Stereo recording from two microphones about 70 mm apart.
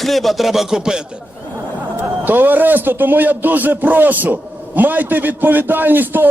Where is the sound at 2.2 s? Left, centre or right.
Right.